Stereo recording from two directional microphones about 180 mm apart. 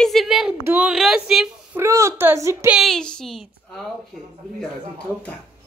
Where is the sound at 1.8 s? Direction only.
15° right (ahead or behind).